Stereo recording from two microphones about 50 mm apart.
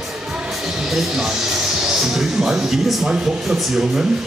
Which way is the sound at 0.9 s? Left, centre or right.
Centre.